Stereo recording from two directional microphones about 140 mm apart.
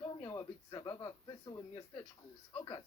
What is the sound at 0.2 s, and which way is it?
Speech, 30° left (ahead or behind).